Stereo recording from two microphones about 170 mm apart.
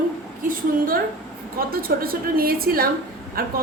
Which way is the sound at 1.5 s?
60° right (ahead or behind).